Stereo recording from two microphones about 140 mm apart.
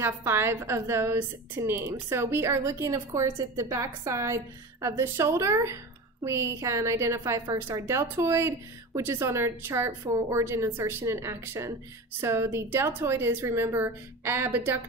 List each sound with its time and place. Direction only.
0.0 s a woman's voice: 15° right (ahead or behind)